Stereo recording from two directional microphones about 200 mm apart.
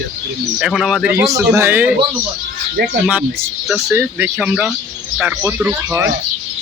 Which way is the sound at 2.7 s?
55° right (ahead or behind).